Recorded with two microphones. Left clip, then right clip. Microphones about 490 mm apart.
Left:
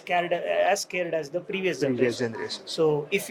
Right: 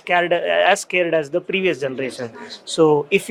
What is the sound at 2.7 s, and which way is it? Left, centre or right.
Speech, right.